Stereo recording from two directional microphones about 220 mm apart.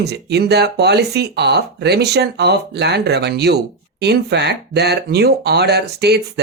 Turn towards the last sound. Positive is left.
turn(degrees=-50)  # may be behind; listen again after turning